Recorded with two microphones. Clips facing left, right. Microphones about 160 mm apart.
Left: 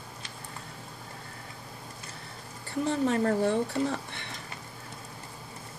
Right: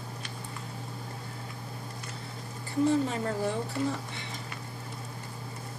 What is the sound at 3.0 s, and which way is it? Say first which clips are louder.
Speech: left 5 dB; 60° left (ahead or behind).